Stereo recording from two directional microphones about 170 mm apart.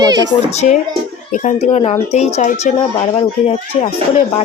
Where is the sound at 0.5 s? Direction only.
40° left (ahead or behind).